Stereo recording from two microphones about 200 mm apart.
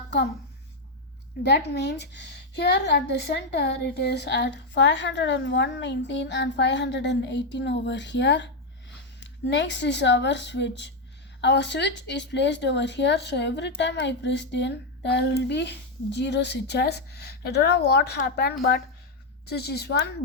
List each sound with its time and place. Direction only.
1.5 s a woman's voice: 55° left (ahead or behind)